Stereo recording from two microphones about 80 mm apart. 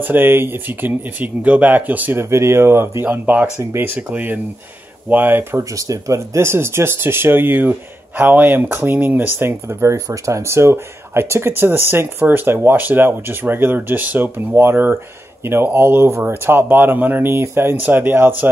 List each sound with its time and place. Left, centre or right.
0.0 s speech: right
2.2 s speech: right
3.1 s speech: right
5.6 s speech: right